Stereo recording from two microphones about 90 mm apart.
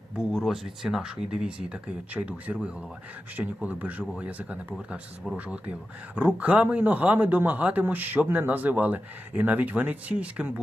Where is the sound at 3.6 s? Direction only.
20° right (ahead or behind).